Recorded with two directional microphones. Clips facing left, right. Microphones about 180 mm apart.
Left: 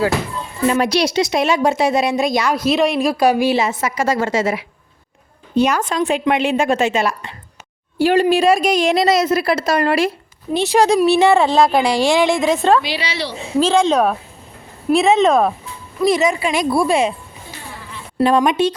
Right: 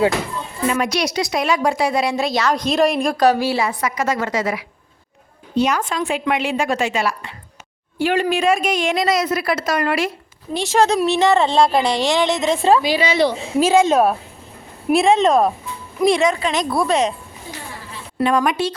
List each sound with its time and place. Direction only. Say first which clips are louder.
0.7 s a woman's voice: left 4 dB; 35° left (ahead or behind)
5.5 s a woman's voice: left 2 dB; 50° left (ahead or behind)
6.1 s a woman's voice: left 4 dB; 30° left (ahead or behind)
10.6 s a woman's voice: left 3 dB; 15° left (ahead or behind)
11.8 s speech: left 2 dB; 25° right (ahead or behind)
12.0 s a woman's voice: left 3 dB; 10° left (ahead or behind)
12.9 s a woman's voice: right 7 dB; 45° right (ahead or behind)
13.6 s a woman's voice: even; 10° right (ahead or behind); by 17.2 s 10° left (ahead or behind)
18.2 s speech: left 3 dB; 35° left (ahead or behind)
18.4 s a woman's voice: left 4 dB; 20° left (ahead or behind)